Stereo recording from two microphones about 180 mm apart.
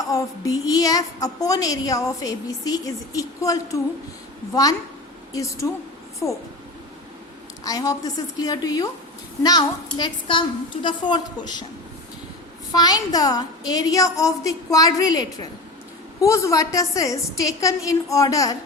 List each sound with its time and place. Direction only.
0.1 s a woman's voice: 20° left (ahead or behind)
5.3 s a woman's voice: 15° left (ahead or behind)
7.6 s a woman's voice: 20° left (ahead or behind)
12.7 s a woman's voice: 20° left (ahead or behind)